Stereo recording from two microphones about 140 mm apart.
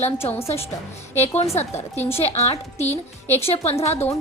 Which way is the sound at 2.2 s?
50° left (ahead or behind).